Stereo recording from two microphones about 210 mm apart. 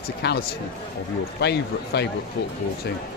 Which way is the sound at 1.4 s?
50° left (ahead or behind).